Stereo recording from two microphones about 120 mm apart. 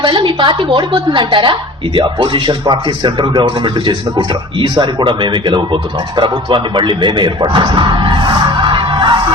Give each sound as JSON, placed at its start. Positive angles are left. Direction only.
{"t": 0.0, "sound": "speech", "side_deg": -40}